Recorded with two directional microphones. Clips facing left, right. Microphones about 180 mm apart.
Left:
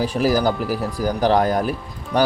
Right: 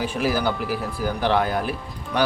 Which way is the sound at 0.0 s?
40° left (ahead or behind).